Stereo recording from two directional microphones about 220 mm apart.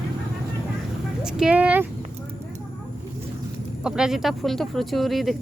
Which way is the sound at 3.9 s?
5° right (ahead or behind).